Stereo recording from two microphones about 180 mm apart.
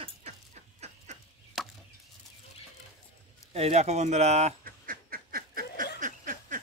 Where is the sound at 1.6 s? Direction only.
Centre (ahead or behind).